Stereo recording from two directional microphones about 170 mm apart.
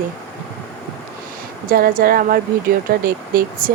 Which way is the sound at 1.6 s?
55° right (ahead or behind).